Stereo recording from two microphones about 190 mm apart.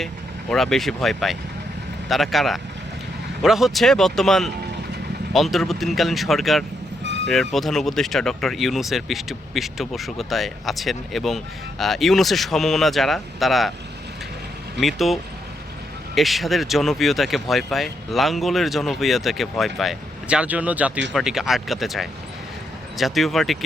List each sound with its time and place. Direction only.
0.5 s speech: centre (ahead or behind)
7.0 s music: 70° right (ahead or behind)
7.3 s speech: centre (ahead or behind)
14.8 s speech: centre (ahead or behind)